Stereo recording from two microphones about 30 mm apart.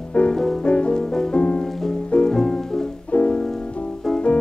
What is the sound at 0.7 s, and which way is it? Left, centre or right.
Music, left.